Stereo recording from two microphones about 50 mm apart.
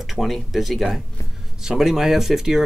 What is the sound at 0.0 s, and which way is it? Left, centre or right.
Speech, centre.